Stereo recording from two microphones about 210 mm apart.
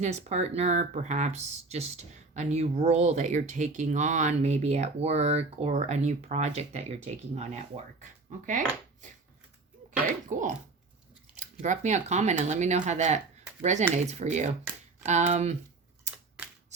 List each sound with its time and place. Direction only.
0.0 s speech: 30° right (ahead or behind)
8.4 s dishes: 35° right (ahead or behind)
10.2 s speech: 35° right (ahead or behind)
11.6 s speech: 35° right (ahead or behind)